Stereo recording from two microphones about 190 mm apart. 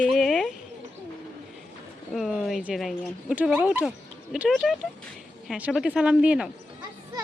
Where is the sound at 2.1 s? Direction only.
Centre (ahead or behind).